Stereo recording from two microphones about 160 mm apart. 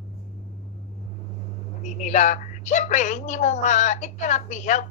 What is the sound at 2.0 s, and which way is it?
A woman's voice, 50° left (ahead or behind).